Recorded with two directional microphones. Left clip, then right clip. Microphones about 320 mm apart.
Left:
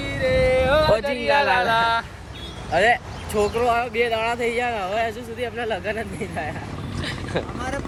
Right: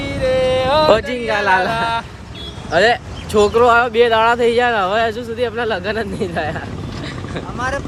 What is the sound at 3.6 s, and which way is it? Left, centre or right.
Speech, right.